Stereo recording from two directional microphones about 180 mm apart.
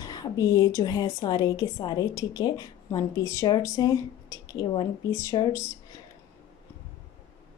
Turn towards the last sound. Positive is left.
turn(degrees=15)  # may be behind; listen again after turning